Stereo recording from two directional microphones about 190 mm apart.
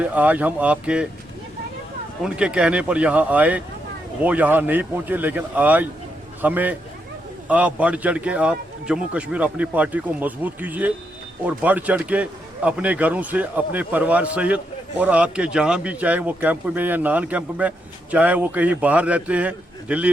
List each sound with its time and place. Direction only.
0.0 s speech: 10° right (ahead or behind)
2.2 s speech: 5° right (ahead or behind)